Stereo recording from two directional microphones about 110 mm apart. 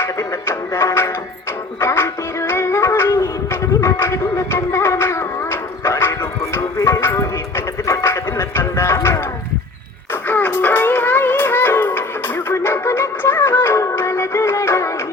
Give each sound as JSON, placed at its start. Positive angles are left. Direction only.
{"t": 0.0, "sound": "music", "side_deg": 25}
{"t": 10.2, "sound": "music", "side_deg": 20}